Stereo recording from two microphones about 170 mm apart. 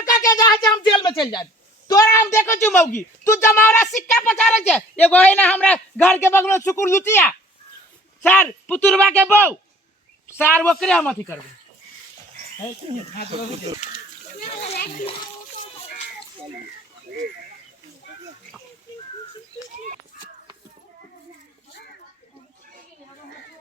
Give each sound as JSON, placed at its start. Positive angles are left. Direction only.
{"t": 0.0, "sound": "a sound", "side_deg": 20}
{"t": 0.9, "sound": "a woman's voice", "side_deg": 25}
{"t": 9.0, "sound": "speech", "side_deg": -10}
{"t": 10.2, "sound": "a man's voice", "side_deg": 10}
{"t": 12.8, "sound": "speech", "side_deg": -35}